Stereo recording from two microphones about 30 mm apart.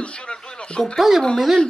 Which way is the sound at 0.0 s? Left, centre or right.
Left.